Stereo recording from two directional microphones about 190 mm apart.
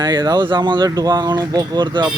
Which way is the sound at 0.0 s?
20° right (ahead or behind).